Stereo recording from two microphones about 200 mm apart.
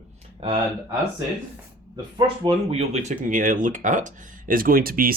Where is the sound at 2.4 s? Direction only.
30° right (ahead or behind).